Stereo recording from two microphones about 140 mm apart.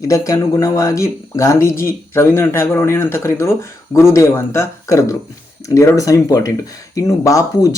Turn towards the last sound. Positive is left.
turn(degrees=25)  # may be behind; listen again after turning